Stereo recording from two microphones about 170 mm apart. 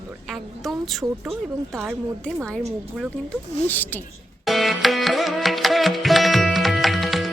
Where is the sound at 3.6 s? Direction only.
10° left (ahead or behind).